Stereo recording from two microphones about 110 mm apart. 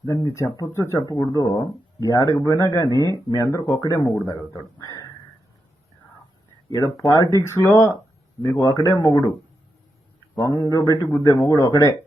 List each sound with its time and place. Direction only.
0.0 s speech: 25° left (ahead or behind)
6.7 s speech: 30° left (ahead or behind)
10.4 s speech: 30° left (ahead or behind)